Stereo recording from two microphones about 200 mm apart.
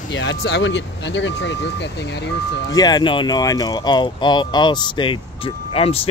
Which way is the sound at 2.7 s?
20° left (ahead or behind).